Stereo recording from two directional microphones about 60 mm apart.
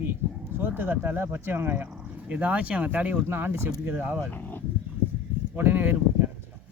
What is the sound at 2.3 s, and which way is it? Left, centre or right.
Speech, right.